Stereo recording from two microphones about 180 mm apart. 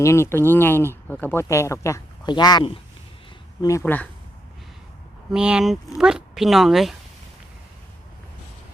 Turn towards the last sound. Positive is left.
turn(degrees=0)  # may be behind; listen again after turning